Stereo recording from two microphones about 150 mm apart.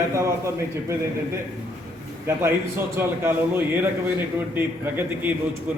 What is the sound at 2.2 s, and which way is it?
A man's voice, 15° right (ahead or behind).